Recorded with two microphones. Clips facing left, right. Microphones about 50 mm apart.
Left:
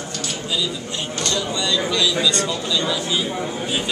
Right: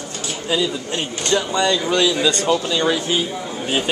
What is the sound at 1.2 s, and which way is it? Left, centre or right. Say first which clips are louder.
A man's voice: right 6 dB; right.